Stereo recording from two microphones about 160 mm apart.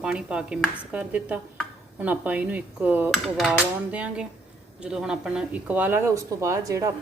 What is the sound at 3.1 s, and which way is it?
Hammer, centre (ahead or behind).